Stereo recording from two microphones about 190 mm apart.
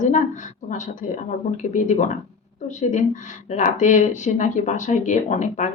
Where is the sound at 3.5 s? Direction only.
40° left (ahead or behind).